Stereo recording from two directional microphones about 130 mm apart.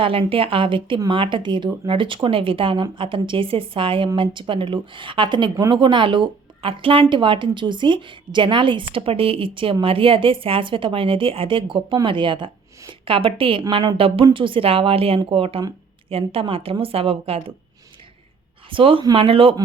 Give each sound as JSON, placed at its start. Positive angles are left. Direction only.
{"t": 0.0, "sound": "a woman's voice", "side_deg": -45}
{"t": 18.7, "sound": "a woman's voice", "side_deg": -40}